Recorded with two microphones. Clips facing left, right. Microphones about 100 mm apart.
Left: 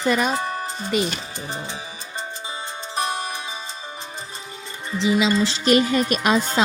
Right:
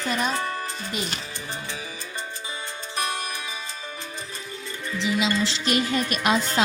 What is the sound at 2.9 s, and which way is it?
Music, 25° left (ahead or behind).